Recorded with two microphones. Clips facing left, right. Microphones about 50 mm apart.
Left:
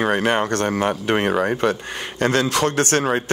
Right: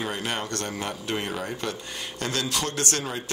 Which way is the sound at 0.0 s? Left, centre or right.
Left.